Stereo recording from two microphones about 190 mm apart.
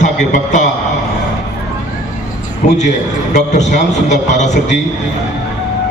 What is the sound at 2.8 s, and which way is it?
A man's voice, 40° left (ahead or behind).